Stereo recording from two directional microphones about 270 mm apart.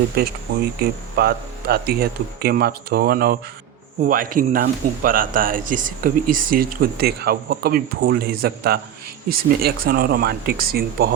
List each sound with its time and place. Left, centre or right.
0.2 s speech: right